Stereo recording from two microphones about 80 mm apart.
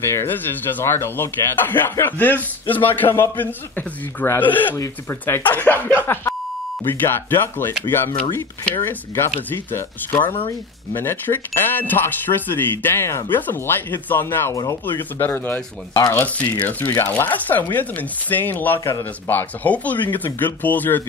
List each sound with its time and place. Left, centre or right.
0.0 s speech: left
14.5 s speech: left
14.9 s speech: left